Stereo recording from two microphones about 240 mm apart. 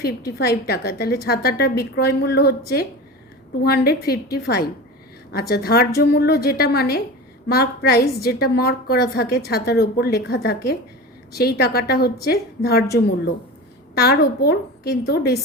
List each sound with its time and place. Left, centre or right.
0.3 s a woman's voice: left